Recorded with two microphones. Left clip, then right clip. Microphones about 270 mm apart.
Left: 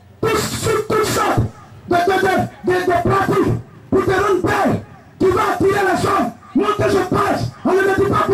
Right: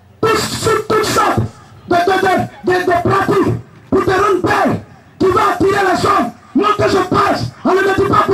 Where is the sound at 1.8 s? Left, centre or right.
Centre.